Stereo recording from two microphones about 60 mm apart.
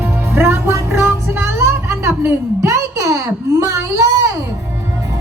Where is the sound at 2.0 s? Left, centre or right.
Right.